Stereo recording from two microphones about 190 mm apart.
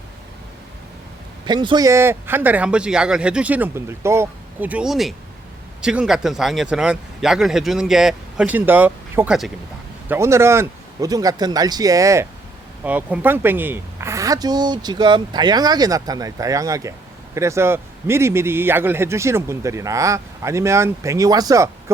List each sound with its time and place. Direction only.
1.5 s a man's voice: 20° right (ahead or behind); by 9.5 s 5° right (ahead or behind)
10.1 s a man's voice: 15° right (ahead or behind)